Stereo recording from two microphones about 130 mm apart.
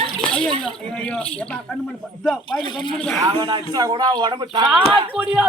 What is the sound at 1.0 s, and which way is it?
Speech, 10° left (ahead or behind).